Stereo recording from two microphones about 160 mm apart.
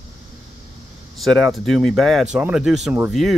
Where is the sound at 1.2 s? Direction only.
Centre (ahead or behind).